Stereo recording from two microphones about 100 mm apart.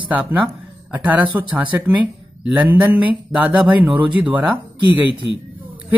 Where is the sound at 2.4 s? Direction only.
15° right (ahead or behind).